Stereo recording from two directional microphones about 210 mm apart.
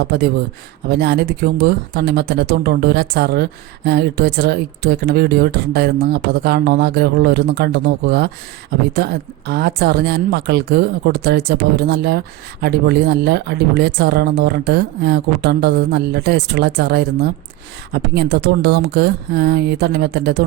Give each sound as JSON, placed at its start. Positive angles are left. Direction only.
{"t": 0.0, "sound": "speech", "side_deg": -50}